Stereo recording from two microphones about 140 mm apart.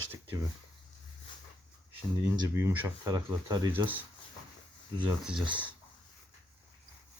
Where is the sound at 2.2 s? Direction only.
25° right (ahead or behind).